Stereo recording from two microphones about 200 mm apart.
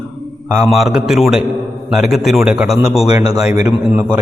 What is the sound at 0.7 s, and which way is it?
A man's voice, centre (ahead or behind).